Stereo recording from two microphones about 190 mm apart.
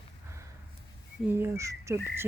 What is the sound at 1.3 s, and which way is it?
Speech, 15° right (ahead or behind).